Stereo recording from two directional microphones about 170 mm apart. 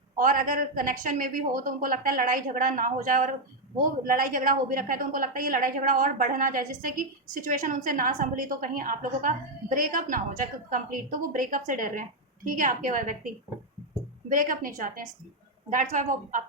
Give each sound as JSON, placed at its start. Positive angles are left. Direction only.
{"t": 0.2, "sound": "a woman's voice", "side_deg": -55}
{"t": 14.3, "sound": "a woman's voice", "side_deg": -55}